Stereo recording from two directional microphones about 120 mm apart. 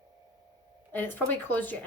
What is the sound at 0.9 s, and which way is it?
Speech, 15° left (ahead or behind).